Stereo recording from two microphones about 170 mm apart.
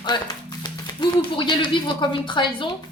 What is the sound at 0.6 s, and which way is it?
Speech, 25° left (ahead or behind).